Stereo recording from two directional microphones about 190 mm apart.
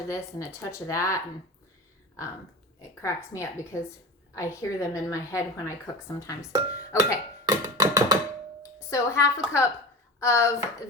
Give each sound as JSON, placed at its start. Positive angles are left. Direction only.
{"t": 0.1, "sound": "a woman's voice", "side_deg": 15}
{"t": 3.0, "sound": "a woman's voice", "side_deg": 15}
{"t": 7.4, "sound": "a sound", "side_deg": -20}
{"t": 8.9, "sound": "a woman's voice", "side_deg": 15}